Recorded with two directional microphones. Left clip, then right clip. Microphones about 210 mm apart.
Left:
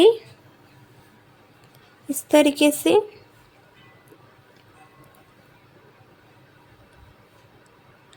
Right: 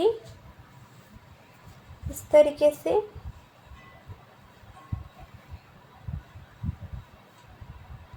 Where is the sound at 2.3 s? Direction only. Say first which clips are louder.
Left 1 dB; 55° left (ahead or behind).